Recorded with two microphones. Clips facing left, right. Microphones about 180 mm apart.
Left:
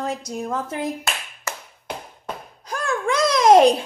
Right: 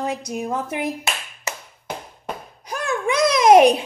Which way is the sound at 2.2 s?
15° right (ahead or behind).